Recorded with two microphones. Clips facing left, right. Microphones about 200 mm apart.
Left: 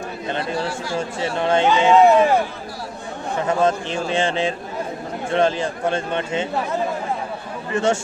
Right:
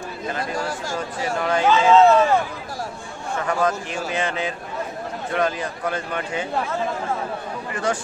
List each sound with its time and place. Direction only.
0.4 s chatter: 45° right (ahead or behind)
1.4 s speech: 25° left (ahead or behind)
3.3 s a man's voice: 25° left (ahead or behind)
7.7 s speech: 25° left (ahead or behind)